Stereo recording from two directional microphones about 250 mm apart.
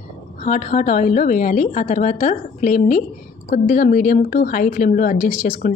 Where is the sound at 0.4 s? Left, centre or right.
Left.